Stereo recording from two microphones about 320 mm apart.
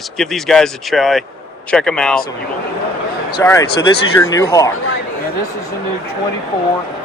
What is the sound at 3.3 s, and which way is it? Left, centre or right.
Speech, centre.